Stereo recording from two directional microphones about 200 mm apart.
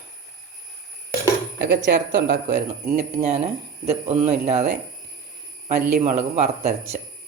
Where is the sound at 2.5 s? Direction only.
40° right (ahead or behind).